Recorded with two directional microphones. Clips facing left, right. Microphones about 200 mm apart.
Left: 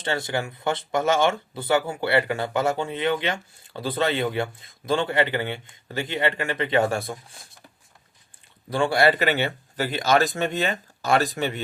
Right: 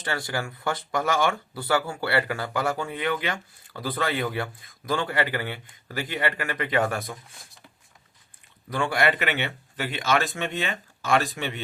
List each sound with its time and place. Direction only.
0.0 s speech: 25° left (ahead or behind)
8.7 s speech: 30° left (ahead or behind)